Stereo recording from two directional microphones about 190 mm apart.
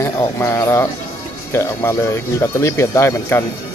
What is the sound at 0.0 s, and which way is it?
Speech, 15° left (ahead or behind).